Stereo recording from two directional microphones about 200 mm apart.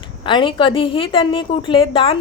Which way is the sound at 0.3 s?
25° left (ahead or behind).